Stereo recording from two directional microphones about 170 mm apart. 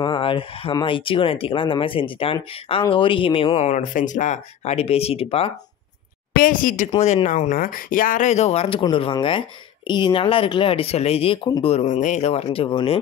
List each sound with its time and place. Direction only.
0.0 s speech: 30° left (ahead or behind)
6.3 s speech: 55° left (ahead or behind)
6.9 s speech: 35° left (ahead or behind)